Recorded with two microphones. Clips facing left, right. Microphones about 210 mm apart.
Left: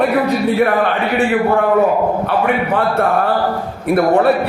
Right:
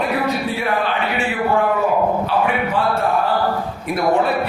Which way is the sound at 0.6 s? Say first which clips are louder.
Left 6 dB; 55° left (ahead or behind).